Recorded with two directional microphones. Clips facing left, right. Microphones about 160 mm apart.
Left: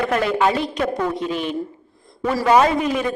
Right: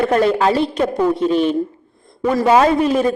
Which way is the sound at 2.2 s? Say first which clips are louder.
Right 5 dB; 20° right (ahead or behind).